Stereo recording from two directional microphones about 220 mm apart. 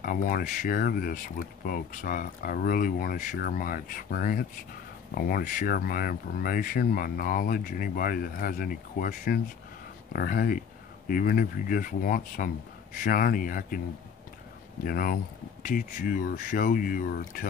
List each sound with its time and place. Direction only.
0.0 s speech: 40° left (ahead or behind)
14.9 s speech: 40° left (ahead or behind)